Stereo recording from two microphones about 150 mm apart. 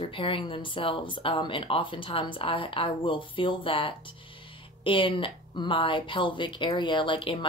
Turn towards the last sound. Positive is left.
turn(degrees=35)  # may be behind; listen again after turning